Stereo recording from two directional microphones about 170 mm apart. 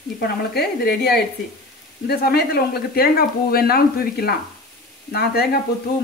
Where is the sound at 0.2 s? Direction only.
70° left (ahead or behind).